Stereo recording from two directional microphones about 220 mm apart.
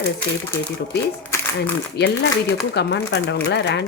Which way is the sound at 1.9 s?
50° left (ahead or behind).